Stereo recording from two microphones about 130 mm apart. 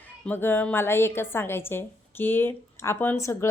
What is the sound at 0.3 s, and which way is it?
A woman's voice, 15° left (ahead or behind).